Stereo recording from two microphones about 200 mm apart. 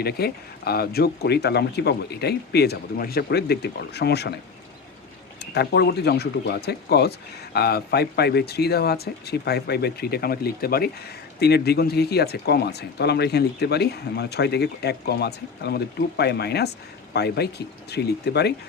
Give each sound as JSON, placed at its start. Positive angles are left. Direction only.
{"t": 0.0, "sound": "speech", "side_deg": 50}
{"t": 5.4, "sound": "speech", "side_deg": 55}